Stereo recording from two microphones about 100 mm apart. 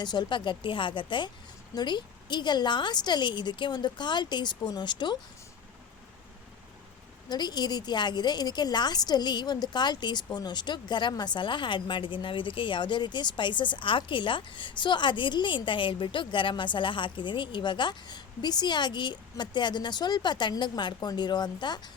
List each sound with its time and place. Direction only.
0.0 s speech: 50° left (ahead or behind)
7.3 s speech: 45° left (ahead or behind)